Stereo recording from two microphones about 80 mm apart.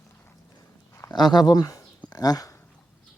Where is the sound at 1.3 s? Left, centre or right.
Left.